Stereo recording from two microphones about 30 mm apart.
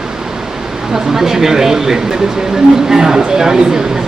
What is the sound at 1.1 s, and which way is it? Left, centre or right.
Speech, centre.